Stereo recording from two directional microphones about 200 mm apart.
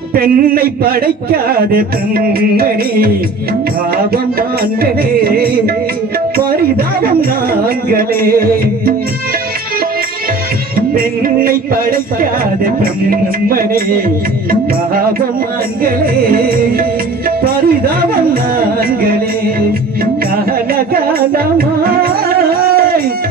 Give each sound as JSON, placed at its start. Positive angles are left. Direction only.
{"t": 0.1, "sound": "speech", "side_deg": -45}
{"t": 5.2, "sound": "speech", "side_deg": -50}
{"t": 11.0, "sound": "speech", "side_deg": -45}
{"t": 15.8, "sound": "speech", "side_deg": -45}
{"t": 17.4, "sound": "a sound", "side_deg": -50}
{"t": 20.7, "sound": "music", "side_deg": -50}